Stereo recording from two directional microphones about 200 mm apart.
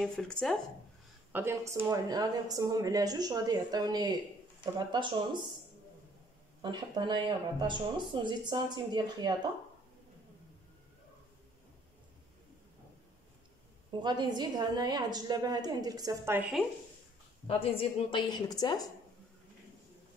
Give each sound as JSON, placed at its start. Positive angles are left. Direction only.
{"t": 0.0, "sound": "speech", "side_deg": 5}
{"t": 1.3, "sound": "a woman's voice", "side_deg": -15}
{"t": 6.6, "sound": "a woman's voice", "side_deg": -25}
{"t": 14.0, "sound": "a woman's voice", "side_deg": -20}
{"t": 17.5, "sound": "a woman's voice", "side_deg": 30}